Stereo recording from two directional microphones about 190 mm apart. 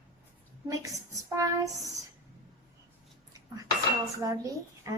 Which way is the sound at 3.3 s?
20° right (ahead or behind).